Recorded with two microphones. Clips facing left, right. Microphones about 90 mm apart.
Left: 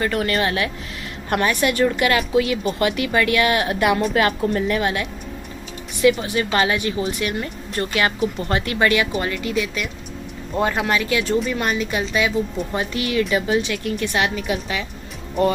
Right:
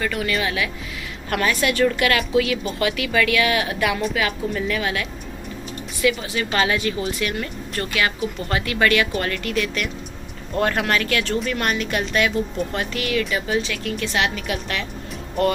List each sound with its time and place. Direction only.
0.0 s speech: 35° left (ahead or behind)
1.3 s a woman's voice: 25° left (ahead or behind); by 4.6 s 45° left (ahead or behind)
4.6 s a woman's voice: 30° left (ahead or behind); by 12.6 s 5° left (ahead or behind)
12.7 s a woman's voice: 25° left (ahead or behind)